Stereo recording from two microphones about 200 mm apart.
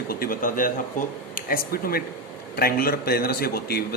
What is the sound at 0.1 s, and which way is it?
Speech, 45° left (ahead or behind).